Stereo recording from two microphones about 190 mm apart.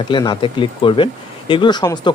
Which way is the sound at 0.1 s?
25° left (ahead or behind).